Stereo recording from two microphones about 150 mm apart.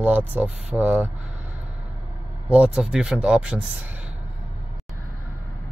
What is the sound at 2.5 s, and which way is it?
Speech, 5° right (ahead or behind).